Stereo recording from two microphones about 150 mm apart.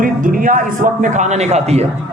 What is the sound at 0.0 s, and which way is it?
A woman's voice, 65° right (ahead or behind).